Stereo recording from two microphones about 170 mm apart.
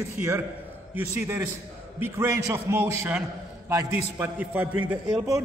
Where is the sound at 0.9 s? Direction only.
10° right (ahead or behind).